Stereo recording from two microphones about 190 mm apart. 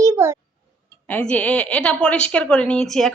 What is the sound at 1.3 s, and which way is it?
A child's voice, 5° left (ahead or behind).